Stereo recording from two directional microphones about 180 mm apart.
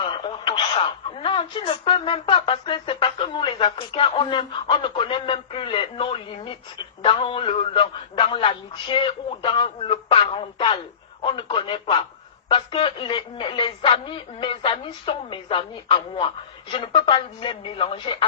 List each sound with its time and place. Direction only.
0.0 s speech: 25° left (ahead or behind)